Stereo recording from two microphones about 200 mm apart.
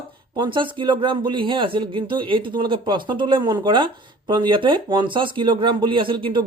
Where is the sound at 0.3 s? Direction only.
25° right (ahead or behind).